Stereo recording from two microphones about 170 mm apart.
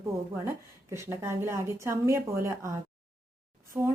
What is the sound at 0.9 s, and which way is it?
Speech, 15° right (ahead or behind).